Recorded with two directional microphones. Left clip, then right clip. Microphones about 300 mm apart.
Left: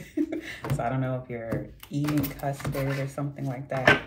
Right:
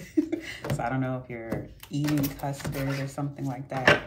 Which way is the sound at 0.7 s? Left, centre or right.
Centre.